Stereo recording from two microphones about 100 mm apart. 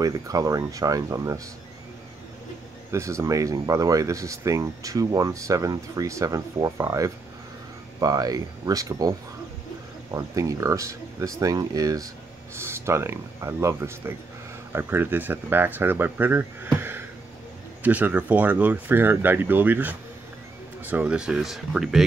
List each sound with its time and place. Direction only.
0.0 s speech: 35° right (ahead or behind)
2.9 s speech: 30° right (ahead or behind)
10.1 s speech: 35° right (ahead or behind)
12.5 s speech: 25° right (ahead or behind); by 22.0 s 5° right (ahead or behind)